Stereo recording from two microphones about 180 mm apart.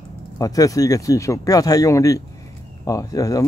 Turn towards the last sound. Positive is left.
turn(degrees=20)  # may be behind; listen again after turning